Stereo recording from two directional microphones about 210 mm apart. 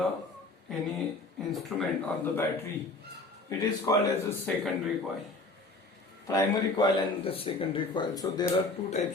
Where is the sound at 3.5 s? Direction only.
15° left (ahead or behind).